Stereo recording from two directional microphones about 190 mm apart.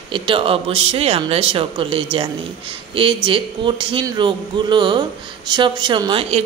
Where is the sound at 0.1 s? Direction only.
25° right (ahead or behind).